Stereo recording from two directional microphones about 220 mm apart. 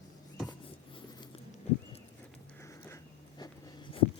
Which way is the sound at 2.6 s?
10° left (ahead or behind).